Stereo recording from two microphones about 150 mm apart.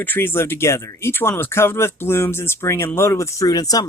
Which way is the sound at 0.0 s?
15° left (ahead or behind).